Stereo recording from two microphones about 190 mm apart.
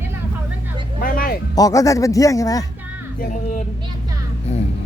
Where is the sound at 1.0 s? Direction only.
50° left (ahead or behind).